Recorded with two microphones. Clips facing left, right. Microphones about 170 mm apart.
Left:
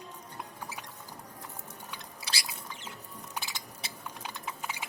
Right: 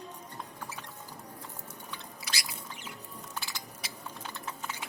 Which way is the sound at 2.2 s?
30° left (ahead or behind).